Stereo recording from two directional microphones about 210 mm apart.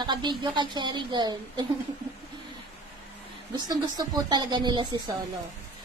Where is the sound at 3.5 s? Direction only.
20° right (ahead or behind).